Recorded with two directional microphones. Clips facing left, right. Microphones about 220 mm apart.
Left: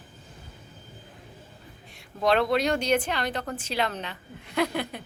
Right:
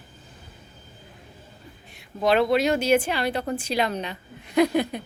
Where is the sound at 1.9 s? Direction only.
Centre (ahead or behind).